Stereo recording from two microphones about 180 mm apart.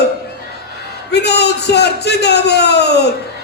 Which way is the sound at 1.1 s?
65° left (ahead or behind).